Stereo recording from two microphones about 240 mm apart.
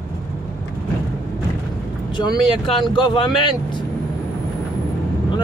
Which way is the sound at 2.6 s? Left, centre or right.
Left.